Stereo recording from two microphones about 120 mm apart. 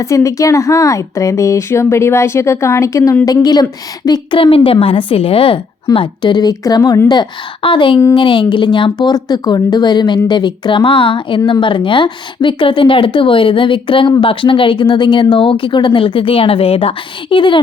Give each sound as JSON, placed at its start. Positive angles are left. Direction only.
{"t": 0.0, "sound": "speech", "side_deg": 25}
{"t": 7.1, "sound": "speech", "side_deg": 40}